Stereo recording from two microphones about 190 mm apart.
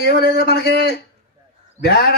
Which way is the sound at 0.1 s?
55° left (ahead or behind).